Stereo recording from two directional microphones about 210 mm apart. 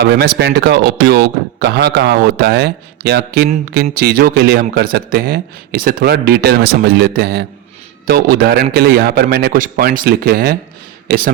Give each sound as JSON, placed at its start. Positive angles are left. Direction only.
{"t": 0.2, "sound": "speech", "side_deg": -55}